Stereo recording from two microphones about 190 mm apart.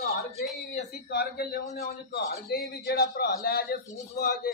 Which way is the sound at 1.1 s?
55° left (ahead or behind).